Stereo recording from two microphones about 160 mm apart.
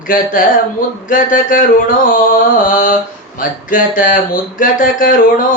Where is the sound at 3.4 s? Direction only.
55° left (ahead or behind).